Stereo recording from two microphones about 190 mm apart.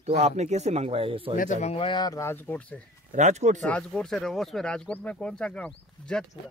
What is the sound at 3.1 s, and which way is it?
Speech, 40° right (ahead or behind).